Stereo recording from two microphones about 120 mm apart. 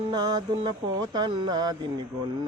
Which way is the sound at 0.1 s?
35° right (ahead or behind).